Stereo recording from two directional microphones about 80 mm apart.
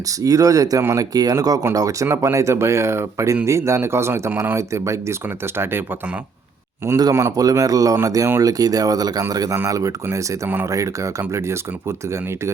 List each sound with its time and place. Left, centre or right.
0.2 s speech: right
7.1 s speech: right
7.3 s speech: right
9.6 s speech: right